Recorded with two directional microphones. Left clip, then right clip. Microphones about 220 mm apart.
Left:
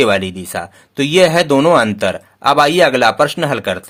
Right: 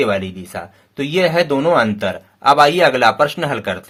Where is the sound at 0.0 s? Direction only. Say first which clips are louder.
Left 4 dB; 35° left (ahead or behind).